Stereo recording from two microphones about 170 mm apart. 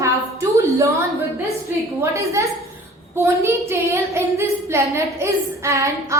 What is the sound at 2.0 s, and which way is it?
Child singing, 15° right (ahead or behind).